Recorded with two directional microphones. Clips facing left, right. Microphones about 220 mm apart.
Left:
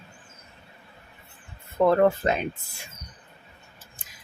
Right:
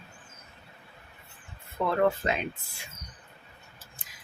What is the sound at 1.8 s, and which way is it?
Speech, 45° left (ahead or behind).